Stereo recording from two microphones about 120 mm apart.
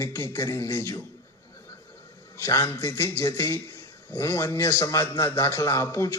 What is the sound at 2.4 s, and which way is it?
A man's voice, 20° left (ahead or behind).